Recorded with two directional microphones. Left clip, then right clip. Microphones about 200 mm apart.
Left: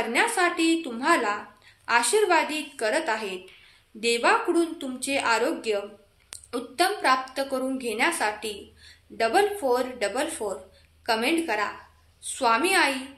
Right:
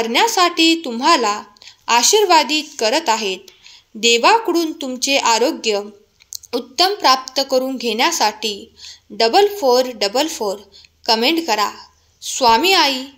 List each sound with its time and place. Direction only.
0.1 s a woman's voice: 40° right (ahead or behind)